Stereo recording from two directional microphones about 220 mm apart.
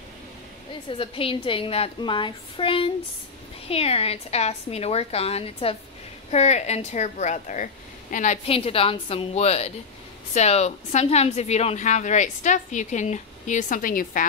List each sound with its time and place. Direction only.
0.8 s a woman's voice: 25° left (ahead or behind)